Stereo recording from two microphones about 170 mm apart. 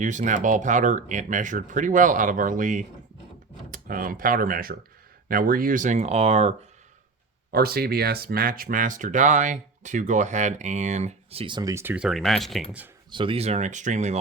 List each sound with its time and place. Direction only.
0.0 s speech: 45° right (ahead or behind)
7.5 s speech: 65° right (ahead or behind); by 12.6 s centre (ahead or behind)
13.1 s speech: 30° right (ahead or behind)